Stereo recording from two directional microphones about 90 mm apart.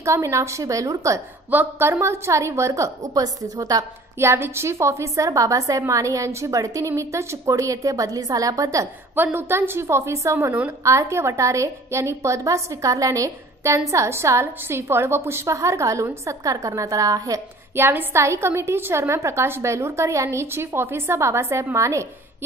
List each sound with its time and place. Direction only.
0.0 s a woman's voice: 35° right (ahead or behind)
1.5 s a woman's voice: 25° right (ahead or behind); by 3.8 s 40° right (ahead or behind)
4.2 s a woman's voice: 30° right (ahead or behind)
9.1 s a woman's voice: 20° right (ahead or behind); by 17.4 s 40° right (ahead or behind)
17.7 s a woman's voice: 25° right (ahead or behind)